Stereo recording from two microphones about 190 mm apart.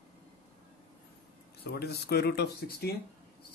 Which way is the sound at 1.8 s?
55° left (ahead or behind).